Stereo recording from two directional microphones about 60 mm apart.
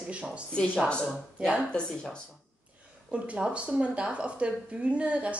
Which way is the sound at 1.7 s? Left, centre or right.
Centre.